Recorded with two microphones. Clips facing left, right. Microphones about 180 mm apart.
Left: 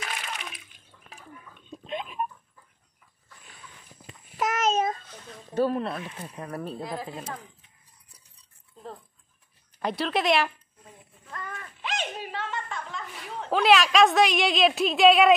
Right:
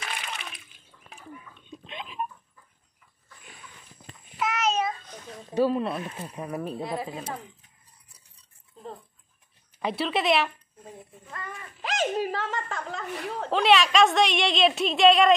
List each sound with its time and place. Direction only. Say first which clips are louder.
0.0 s water: left 1 dB; centre (ahead or behind)
1.7 s a sound: left 6 dB; 45° left (ahead or behind)
4.4 s child singing: left 2 dB; 45° left (ahead or behind)
5.5 s a woman's voice: right 1 dB; 5° right (ahead or behind)
9.8 s a woman's voice: even; centre (ahead or behind)
11.8 s chuckle: right 7 dB; 40° right (ahead or behind)
13.5 s a woman's voice: left 1 dB; centre (ahead or behind)